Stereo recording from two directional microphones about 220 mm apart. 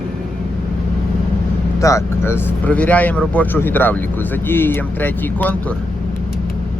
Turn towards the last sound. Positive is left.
turn(degrees=10)  # may be behind; listen again after turning